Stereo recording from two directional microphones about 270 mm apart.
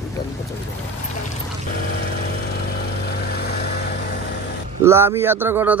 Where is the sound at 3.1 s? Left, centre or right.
Left.